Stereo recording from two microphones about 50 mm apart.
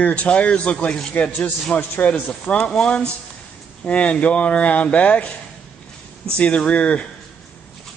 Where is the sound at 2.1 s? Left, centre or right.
Centre.